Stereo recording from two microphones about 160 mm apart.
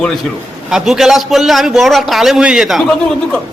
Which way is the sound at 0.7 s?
5° right (ahead or behind).